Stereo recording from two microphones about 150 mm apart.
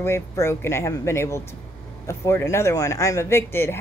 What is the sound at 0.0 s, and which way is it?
A woman's voice, 15° left (ahead or behind).